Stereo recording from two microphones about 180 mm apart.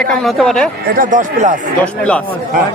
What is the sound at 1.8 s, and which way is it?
Speech, 5° left (ahead or behind).